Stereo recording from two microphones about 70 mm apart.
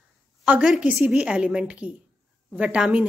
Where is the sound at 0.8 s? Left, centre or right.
Centre.